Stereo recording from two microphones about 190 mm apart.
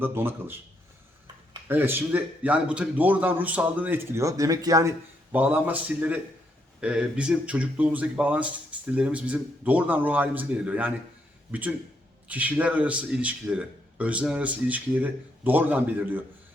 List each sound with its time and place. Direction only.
0.0 s speech: 10° right (ahead or behind)
1.6 s speech: 10° right (ahead or behind)
12.3 s speech: 10° right (ahead or behind)